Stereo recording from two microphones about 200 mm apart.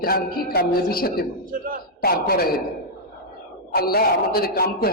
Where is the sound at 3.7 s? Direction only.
50° left (ahead or behind).